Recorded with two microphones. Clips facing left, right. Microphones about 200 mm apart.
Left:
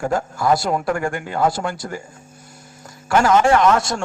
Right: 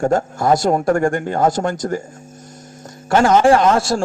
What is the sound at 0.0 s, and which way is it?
Speech, 45° right (ahead or behind).